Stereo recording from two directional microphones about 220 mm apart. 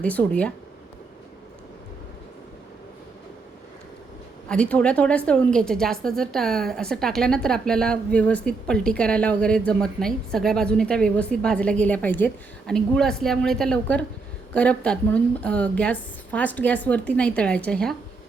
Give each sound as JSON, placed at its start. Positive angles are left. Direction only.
{"t": 0.0, "sound": "speech", "side_deg": 5}
{"t": 4.4, "sound": "a woman's voice", "side_deg": 5}